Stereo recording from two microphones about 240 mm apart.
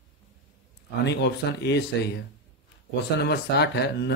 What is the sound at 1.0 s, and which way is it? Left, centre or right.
Speech, left.